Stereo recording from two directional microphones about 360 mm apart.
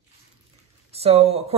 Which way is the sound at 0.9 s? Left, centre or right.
Centre.